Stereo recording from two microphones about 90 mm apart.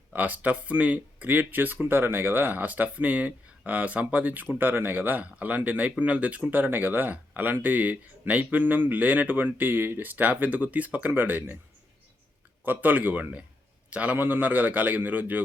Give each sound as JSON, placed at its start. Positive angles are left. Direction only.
{"t": 0.1, "sound": "speech", "side_deg": -20}
{"t": 12.6, "sound": "speech", "side_deg": -20}